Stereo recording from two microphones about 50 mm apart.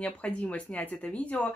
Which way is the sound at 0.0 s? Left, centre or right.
Left.